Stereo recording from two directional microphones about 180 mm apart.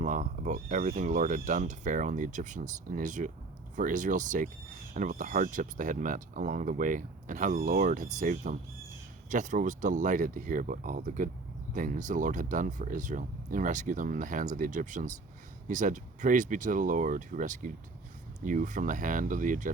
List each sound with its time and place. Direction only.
0.0 s speech: 45° right (ahead or behind)